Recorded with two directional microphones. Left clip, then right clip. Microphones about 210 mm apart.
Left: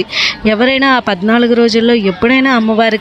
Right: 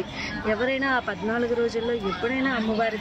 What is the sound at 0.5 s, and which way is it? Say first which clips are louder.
Speech: left 12 dB; 45° left (ahead or behind).